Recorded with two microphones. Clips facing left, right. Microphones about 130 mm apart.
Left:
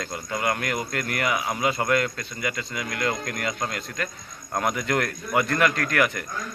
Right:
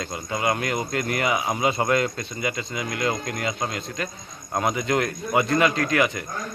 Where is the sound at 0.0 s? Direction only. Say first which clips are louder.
Right 2 dB; 10° right (ahead or behind).